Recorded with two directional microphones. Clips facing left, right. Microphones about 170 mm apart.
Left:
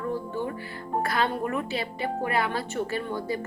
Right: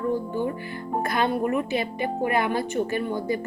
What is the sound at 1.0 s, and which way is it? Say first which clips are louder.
Speech: right 4 dB; 20° right (ahead or behind).